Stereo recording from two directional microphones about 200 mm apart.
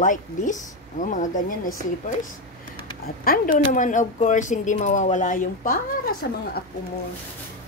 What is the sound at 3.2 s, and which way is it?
Speech, 45° left (ahead or behind).